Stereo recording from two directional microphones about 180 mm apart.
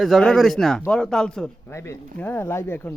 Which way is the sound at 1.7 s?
15° left (ahead or behind).